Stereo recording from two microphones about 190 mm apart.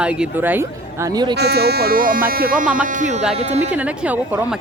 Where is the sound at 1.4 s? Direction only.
60° right (ahead or behind).